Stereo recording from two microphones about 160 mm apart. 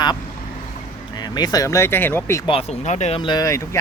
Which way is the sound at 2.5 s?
40° left (ahead or behind).